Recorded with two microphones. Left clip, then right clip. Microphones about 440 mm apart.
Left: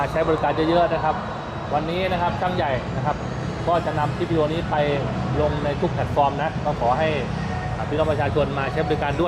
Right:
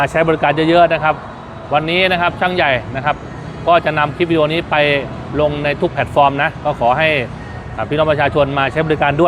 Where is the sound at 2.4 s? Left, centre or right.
Right.